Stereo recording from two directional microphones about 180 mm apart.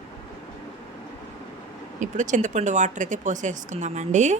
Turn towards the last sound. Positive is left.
turn(degrees=-40)  # may be behind; listen again after turning